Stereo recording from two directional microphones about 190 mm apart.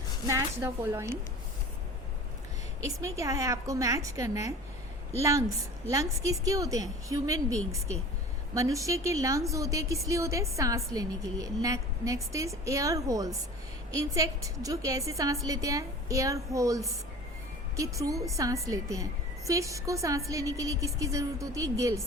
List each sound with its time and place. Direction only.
0.3 s a woman's voice: 15° right (ahead or behind)
2.8 s a woman's voice: 15° right (ahead or behind)